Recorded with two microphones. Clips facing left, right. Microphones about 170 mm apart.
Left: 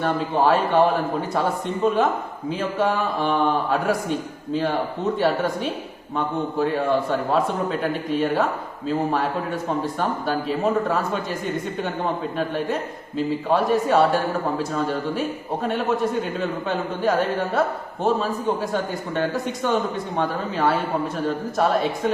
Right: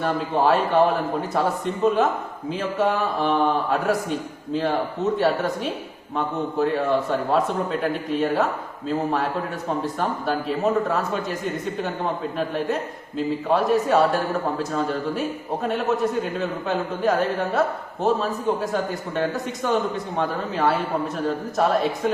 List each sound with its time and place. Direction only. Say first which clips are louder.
0.0 s speech: left 1 dB; centre (ahead or behind)
9.8 s speech: left 1 dB; centre (ahead or behind)
12.4 s speech: right 1 dB; centre (ahead or behind)